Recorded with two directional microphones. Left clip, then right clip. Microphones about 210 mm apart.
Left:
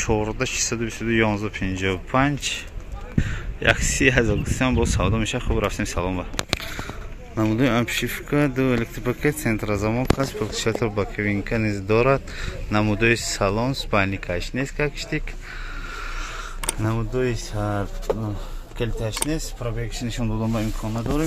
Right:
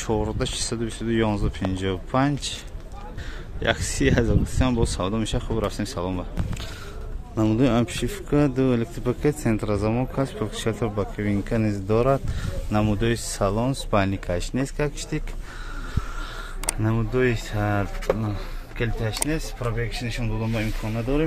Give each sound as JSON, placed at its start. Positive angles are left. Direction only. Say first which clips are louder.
{"t": 0.0, "sound": "a man's voice", "louder": "left 3 dB", "side_deg": 0}
{"t": 7.3, "sound": "a man's voice", "louder": "even", "side_deg": -10}
{"t": 16.6, "sound": "speech", "louder": "even", "side_deg": -10}
{"t": 18.8, "sound": "a man's voice", "louder": "left 1 dB", "side_deg": 0}
{"t": 20.1, "sound": "speech", "louder": "left 2 dB", "side_deg": 30}